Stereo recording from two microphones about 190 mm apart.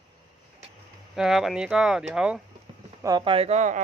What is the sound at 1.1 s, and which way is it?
Speech, centre (ahead or behind).